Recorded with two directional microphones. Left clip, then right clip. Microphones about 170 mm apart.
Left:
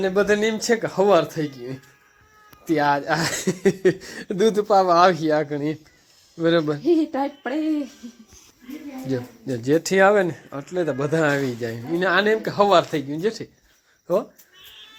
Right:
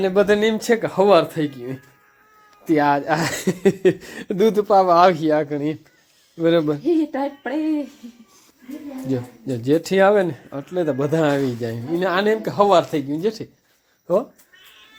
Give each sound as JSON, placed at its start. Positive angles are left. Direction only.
{"t": 0.0, "sound": "speech", "side_deg": -20}
{"t": 6.8, "sound": "a sound", "side_deg": 55}
{"t": 9.0, "sound": "speech", "side_deg": -10}